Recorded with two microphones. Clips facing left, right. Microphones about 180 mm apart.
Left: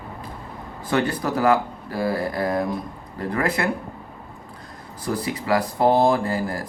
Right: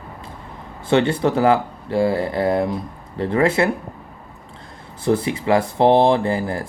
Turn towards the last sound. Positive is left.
turn(degrees=-25)  # may be behind; listen again after turning